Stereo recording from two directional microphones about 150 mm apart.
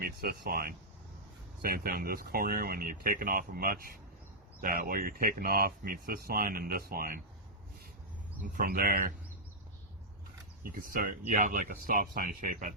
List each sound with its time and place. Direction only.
0.0 s speech: 90° right
8.4 s speech: 75° right (ahead or behind)
10.7 s speech: 65° right (ahead or behind)